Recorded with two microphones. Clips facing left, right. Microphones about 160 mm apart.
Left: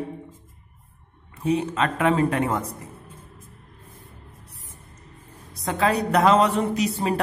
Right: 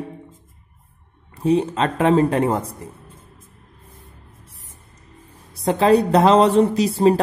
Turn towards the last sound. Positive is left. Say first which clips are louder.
# right 7 dB
turn(degrees=-30)  # may be behind; listen again after turning